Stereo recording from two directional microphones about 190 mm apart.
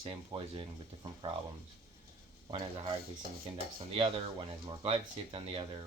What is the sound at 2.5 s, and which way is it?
Speech, 30° right (ahead or behind).